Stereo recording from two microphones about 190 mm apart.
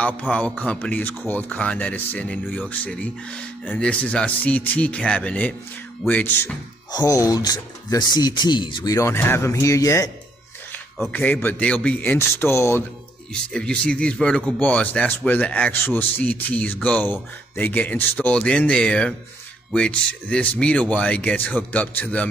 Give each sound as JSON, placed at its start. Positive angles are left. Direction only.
{"t": 0.0, "sound": "speech", "side_deg": 5}
{"t": 11.0, "sound": "speech", "side_deg": 5}